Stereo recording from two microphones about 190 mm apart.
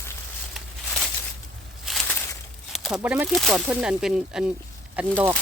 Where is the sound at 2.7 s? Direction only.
Centre (ahead or behind).